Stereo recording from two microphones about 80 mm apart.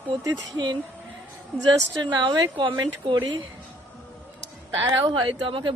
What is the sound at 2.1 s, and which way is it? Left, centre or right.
Speech, right.